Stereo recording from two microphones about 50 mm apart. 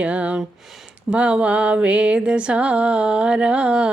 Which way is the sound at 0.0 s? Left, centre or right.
Right.